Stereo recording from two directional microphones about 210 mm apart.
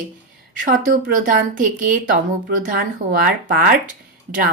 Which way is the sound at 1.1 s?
40° right (ahead or behind).